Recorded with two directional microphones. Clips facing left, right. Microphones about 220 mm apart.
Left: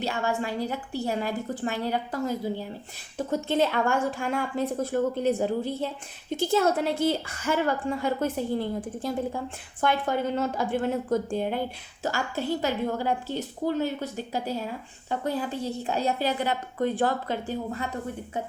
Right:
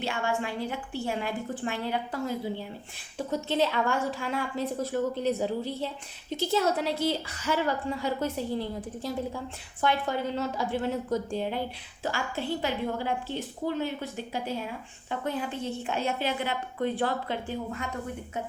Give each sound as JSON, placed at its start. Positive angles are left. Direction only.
{"t": 0.0, "sound": "a woman's voice", "side_deg": 40}